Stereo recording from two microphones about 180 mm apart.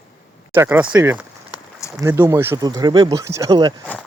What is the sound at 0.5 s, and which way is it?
Speech, 15° right (ahead or behind).